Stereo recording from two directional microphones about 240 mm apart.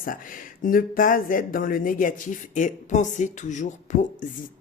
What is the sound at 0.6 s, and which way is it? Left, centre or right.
Speech, left.